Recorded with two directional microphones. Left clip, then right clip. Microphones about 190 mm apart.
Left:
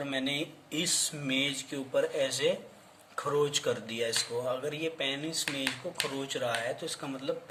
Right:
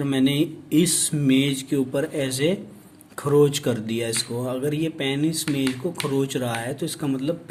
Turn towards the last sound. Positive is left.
turn(degrees=-40)  # may be behind; listen again after turning